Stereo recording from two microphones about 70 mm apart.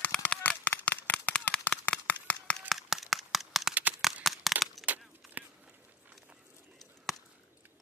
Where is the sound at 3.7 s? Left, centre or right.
Right.